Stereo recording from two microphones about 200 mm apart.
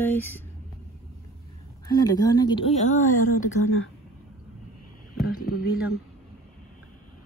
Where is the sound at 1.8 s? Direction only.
20° left (ahead or behind); by 3.5 s 40° left (ahead or behind).